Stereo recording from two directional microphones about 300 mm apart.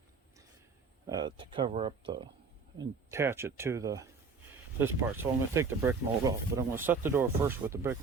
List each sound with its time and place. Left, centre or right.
1.0 s speech: centre